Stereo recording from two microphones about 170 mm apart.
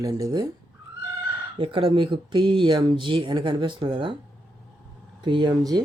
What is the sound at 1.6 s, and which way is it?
Speech, 30° right (ahead or behind).